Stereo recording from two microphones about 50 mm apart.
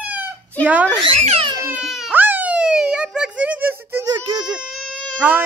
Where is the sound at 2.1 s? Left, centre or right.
Right.